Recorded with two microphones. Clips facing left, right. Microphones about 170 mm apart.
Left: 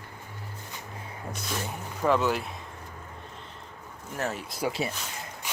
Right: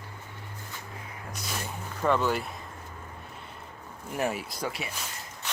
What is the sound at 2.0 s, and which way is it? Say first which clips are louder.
Speech: left 1 dB; centre (ahead or behind).